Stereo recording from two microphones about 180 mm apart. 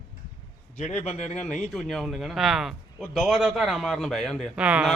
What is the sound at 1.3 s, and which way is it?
A man's voice, 5° left (ahead or behind).